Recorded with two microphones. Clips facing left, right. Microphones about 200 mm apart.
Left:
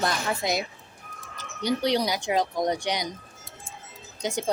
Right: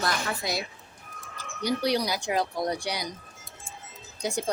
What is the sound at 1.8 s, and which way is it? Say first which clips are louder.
A woman's voice: left 2 dB; 20° left (ahead or behind).